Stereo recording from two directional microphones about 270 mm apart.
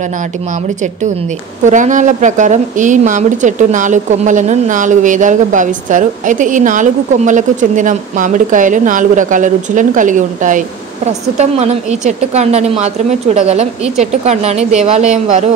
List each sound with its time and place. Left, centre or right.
1.6 s a woman's voice: right